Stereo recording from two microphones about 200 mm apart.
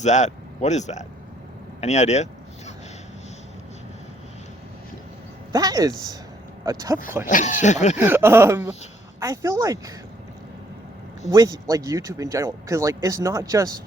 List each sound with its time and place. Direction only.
0.0 s speech: 35° left (ahead or behind)
5.5 s speech: 20° right (ahead or behind)
7.3 s speech: 40° left (ahead or behind)
7.9 s speech: 10° right (ahead or behind)
11.3 s speech: 15° right (ahead or behind)